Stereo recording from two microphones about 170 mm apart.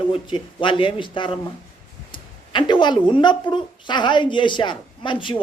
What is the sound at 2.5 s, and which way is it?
A man's voice, 25° left (ahead or behind).